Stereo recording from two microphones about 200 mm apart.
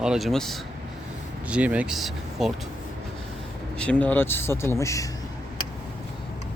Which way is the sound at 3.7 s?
5° left (ahead or behind).